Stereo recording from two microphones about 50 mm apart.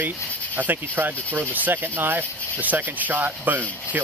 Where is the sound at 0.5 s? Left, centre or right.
Right.